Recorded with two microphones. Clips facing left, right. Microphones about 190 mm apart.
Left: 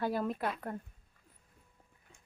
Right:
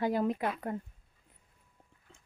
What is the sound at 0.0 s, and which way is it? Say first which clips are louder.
Speech: right 4 dB; 15° right (ahead or behind).